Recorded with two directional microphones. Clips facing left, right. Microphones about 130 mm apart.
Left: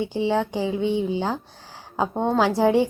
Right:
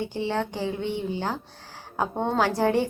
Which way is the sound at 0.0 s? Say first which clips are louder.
Left 5 dB; 15° left (ahead or behind).